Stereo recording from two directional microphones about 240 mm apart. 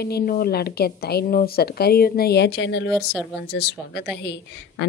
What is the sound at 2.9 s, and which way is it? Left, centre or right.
Speech, centre.